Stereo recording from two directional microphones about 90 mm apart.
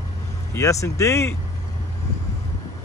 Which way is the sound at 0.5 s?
35° left (ahead or behind).